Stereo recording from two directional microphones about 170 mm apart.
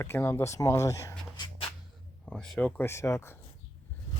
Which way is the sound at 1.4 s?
25° left (ahead or behind).